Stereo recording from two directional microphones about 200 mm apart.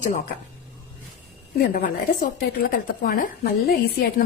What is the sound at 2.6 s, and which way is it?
A woman's voice, 45° left (ahead or behind).